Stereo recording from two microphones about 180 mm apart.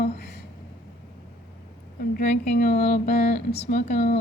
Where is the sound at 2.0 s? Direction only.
50° left (ahead or behind).